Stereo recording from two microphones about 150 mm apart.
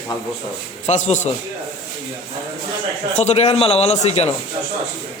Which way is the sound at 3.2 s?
45° left (ahead or behind).